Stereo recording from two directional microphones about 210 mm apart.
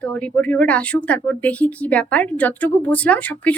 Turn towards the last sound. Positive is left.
turn(degrees=5)  # may be behind; listen again after turning